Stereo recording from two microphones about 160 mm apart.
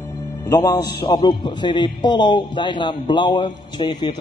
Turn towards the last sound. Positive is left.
turn(degrees=30)  # may be behind; listen again after turning